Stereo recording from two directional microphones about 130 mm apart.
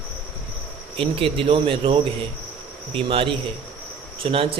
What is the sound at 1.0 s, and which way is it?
Speech, 45° right (ahead or behind).